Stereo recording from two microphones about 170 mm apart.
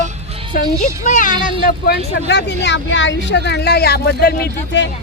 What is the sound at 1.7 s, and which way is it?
Speech, 70° left (ahead or behind).